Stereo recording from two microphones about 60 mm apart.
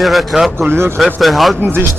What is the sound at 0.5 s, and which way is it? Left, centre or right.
Speech, right.